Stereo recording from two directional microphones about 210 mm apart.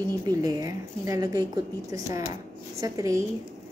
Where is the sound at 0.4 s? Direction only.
15° right (ahead or behind).